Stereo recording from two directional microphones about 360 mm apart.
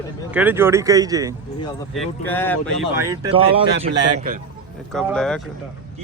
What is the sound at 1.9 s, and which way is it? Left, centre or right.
Speech, centre.